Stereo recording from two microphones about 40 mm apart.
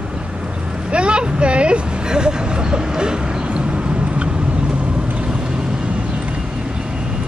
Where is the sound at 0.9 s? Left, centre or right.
Right.